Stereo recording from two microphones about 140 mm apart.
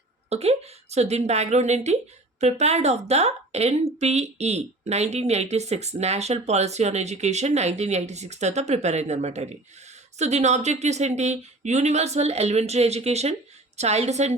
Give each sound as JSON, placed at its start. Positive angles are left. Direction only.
{"t": 0.3, "sound": "a woman's voice", "side_deg": -50}